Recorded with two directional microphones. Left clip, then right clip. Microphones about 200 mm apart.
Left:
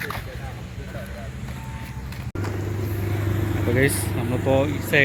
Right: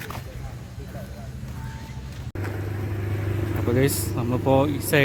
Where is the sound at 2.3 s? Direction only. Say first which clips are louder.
Left 2 dB; 50° left (ahead or behind).